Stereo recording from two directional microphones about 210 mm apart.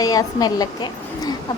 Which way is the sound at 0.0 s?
15° left (ahead or behind).